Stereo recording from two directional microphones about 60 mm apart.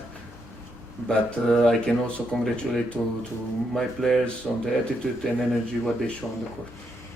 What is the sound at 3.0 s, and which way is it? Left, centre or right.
Speech, left.